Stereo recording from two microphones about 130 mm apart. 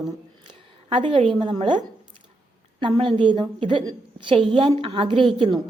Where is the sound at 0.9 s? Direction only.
40° right (ahead or behind).